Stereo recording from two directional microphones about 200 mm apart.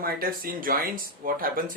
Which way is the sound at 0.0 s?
45° right (ahead or behind).